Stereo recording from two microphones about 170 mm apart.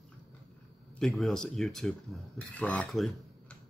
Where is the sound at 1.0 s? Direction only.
Centre (ahead or behind).